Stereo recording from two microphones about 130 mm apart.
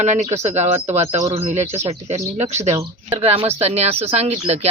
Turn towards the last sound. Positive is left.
turn(degrees=-55)  # may be behind; listen again after turning